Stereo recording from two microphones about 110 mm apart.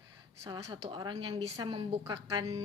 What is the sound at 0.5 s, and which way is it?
A woman's voice, 45° right (ahead or behind).